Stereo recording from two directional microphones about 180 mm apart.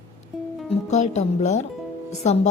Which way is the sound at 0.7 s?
40° left (ahead or behind).